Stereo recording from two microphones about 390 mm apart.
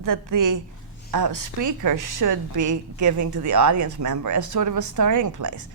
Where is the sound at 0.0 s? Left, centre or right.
Right.